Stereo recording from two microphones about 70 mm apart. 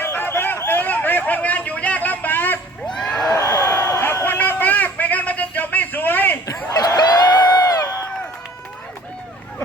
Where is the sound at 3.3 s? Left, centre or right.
Left.